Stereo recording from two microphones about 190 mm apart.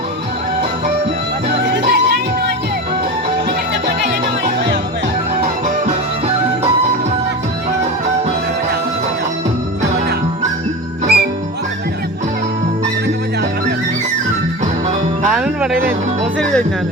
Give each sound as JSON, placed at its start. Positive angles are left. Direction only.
{"t": 1.5, "sound": "music", "side_deg": -60}
{"t": 5.4, "sound": "music", "side_deg": -45}
{"t": 11.0, "sound": "music", "side_deg": -55}
{"t": 15.3, "sound": "music", "side_deg": -5}
{"t": 15.7, "sound": "speech", "side_deg": -50}
{"t": 16.4, "sound": "music", "side_deg": 5}